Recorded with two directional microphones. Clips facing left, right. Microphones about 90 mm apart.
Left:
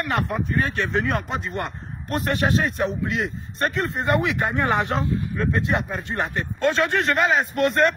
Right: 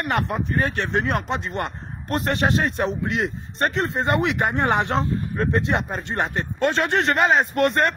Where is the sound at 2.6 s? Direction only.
60° right (ahead or behind).